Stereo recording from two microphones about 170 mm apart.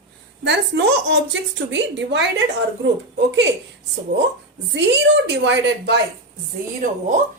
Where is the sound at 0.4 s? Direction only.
90° right.